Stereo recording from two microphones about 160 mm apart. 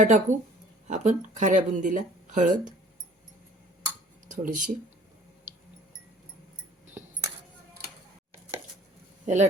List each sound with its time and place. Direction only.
0.0 s speech: 50° right (ahead or behind)
4.3 s speech: 55° right (ahead or behind)
9.2 s speech: 50° right (ahead or behind)